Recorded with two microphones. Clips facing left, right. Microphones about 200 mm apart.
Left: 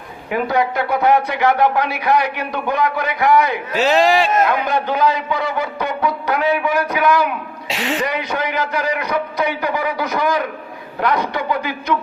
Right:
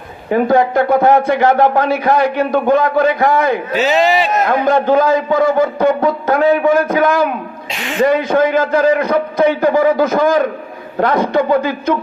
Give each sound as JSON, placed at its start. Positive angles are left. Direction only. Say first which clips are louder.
{"t": 0.4, "sound": "speech", "louder": "right 7 dB", "side_deg": -50}
{"t": 3.8, "sound": "speech", "louder": "even", "side_deg": 0}
{"t": 4.4, "sound": "speech", "louder": "right 6 dB", "side_deg": -45}